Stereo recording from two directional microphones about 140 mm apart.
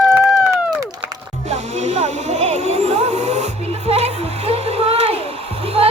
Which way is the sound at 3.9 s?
45° right (ahead or behind).